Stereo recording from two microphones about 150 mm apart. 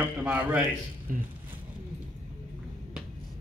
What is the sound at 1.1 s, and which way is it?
Speech, 65° right (ahead or behind).